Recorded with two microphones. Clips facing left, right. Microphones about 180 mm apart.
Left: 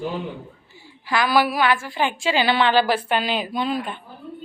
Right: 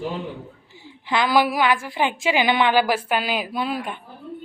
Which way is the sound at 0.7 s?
20° right (ahead or behind).